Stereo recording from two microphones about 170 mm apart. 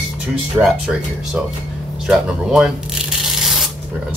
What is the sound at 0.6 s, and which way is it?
Speech, centre (ahead or behind).